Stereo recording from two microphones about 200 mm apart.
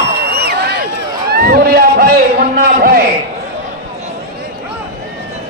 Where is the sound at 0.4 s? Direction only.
55° right (ahead or behind).